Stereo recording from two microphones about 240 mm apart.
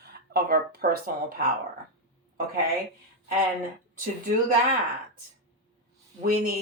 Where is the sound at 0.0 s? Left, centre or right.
Right.